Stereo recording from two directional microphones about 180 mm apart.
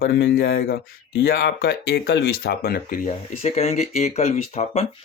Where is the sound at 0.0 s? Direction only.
55° left (ahead or behind).